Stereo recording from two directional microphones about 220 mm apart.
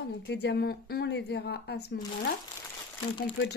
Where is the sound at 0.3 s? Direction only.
50° left (ahead or behind).